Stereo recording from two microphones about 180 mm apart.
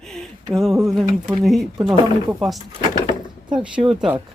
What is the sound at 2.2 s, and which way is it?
Speech, 10° right (ahead or behind).